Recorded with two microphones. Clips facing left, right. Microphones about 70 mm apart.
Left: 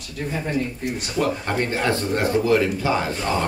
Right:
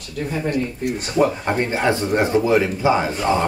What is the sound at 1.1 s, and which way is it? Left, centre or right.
Speech, centre.